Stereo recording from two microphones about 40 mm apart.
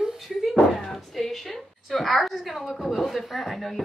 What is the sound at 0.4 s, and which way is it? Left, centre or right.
Speech, centre.